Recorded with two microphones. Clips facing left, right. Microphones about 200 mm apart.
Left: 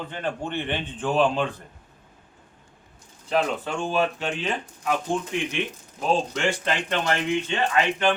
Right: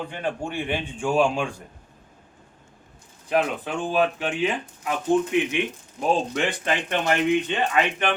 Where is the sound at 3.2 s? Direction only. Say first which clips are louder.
Right 1 dB; 15° right (ahead or behind).